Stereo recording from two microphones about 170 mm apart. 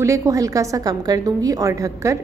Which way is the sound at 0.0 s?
15° right (ahead or behind).